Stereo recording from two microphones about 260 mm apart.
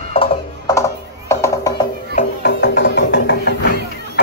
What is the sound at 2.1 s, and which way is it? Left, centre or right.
Music, left.